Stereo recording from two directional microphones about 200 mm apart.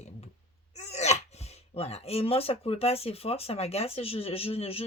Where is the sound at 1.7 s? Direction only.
30° left (ahead or behind).